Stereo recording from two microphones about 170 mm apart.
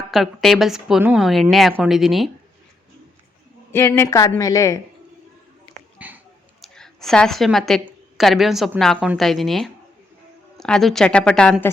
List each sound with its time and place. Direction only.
0.1 s a woman's voice: centre (ahead or behind)
3.7 s a woman's voice: 15° left (ahead or behind)
6.0 s a sound: 10° right (ahead or behind)
6.6 s a woman's voice: centre (ahead or behind)